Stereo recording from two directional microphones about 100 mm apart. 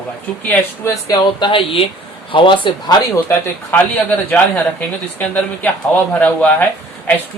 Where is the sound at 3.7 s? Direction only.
15° left (ahead or behind).